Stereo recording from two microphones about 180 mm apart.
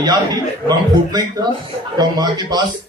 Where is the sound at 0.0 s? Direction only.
25° right (ahead or behind).